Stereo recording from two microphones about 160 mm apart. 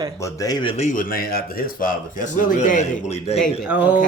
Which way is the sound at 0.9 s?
60° left (ahead or behind).